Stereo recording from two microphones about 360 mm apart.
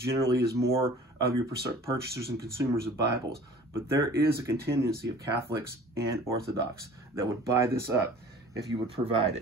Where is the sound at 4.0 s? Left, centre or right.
Centre.